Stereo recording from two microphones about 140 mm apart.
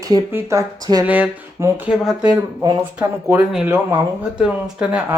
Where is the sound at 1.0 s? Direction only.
10° right (ahead or behind).